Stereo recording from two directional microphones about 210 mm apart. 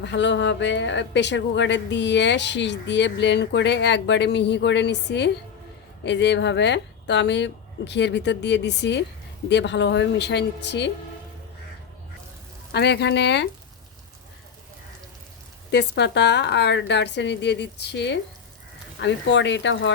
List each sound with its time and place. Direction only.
0.0 s speech: 55° left (ahead or behind)
12.7 s speech: 50° left (ahead or behind)
15.7 s speech: 55° left (ahead or behind)